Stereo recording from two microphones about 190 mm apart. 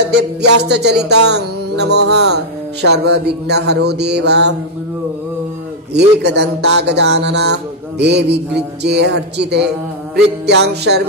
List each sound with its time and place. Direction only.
0.1 s music: 60° right (ahead or behind)
5.9 s music: 65° right (ahead or behind)